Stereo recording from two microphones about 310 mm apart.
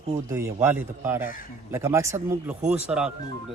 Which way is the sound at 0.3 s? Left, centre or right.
Centre.